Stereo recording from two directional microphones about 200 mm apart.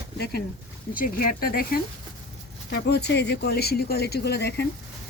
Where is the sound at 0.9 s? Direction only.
45° left (ahead or behind).